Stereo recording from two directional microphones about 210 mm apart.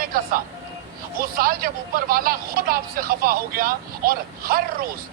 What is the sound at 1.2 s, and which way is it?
Speech, 45° right (ahead or behind).